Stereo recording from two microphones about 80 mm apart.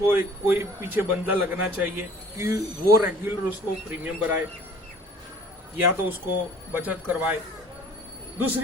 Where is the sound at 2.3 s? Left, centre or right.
Right.